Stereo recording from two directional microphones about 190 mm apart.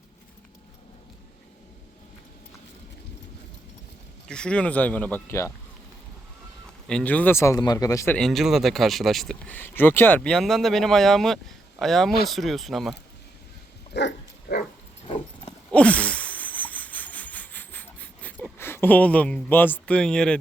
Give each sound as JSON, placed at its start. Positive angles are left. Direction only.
{"t": 4.3, "sound": "speech", "side_deg": 5}
{"t": 6.8, "sound": "speech", "side_deg": 5}
{"t": 8.1, "sound": "speech", "side_deg": 0}
{"t": 13.9, "sound": "dog", "side_deg": 60}
{"t": 15.0, "sound": "horse", "side_deg": 30}
{"t": 15.7, "sound": "a sound", "side_deg": 5}
{"t": 18.5, "sound": "speech", "side_deg": 10}